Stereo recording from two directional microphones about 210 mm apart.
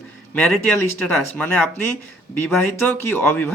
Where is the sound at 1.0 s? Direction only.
10° left (ahead or behind).